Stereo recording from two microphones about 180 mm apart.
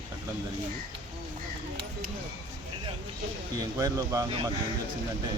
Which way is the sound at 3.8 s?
20° right (ahead or behind).